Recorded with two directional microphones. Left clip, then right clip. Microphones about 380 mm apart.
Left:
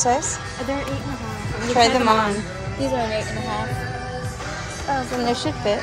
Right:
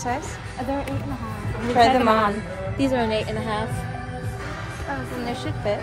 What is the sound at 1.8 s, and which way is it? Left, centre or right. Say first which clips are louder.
Speech: even; centre.